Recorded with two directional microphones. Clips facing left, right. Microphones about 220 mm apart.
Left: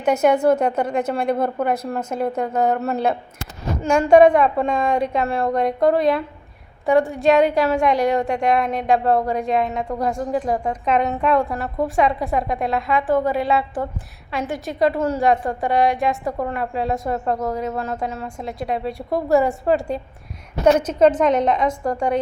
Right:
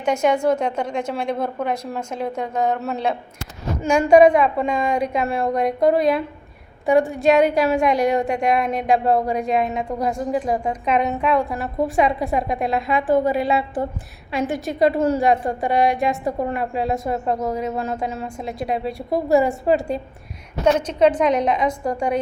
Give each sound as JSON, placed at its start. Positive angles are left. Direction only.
{"t": 0.0, "sound": "a woman's voice", "side_deg": 5}
{"t": 7.3, "sound": "a woman's voice", "side_deg": -20}
{"t": 11.0, "sound": "a woman's voice", "side_deg": 0}
{"t": 20.7, "sound": "a woman's voice", "side_deg": 10}
{"t": 21.1, "sound": "a woman's voice", "side_deg": -15}